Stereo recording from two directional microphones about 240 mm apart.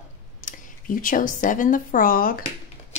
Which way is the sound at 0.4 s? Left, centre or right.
Left.